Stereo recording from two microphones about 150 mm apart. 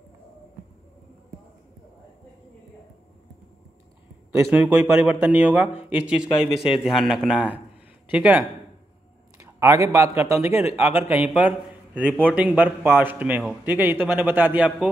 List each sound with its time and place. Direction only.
4.3 s a man's voice: 15° right (ahead or behind)
9.4 s a sound: 20° right (ahead or behind)
9.9 s a man's voice: 20° right (ahead or behind)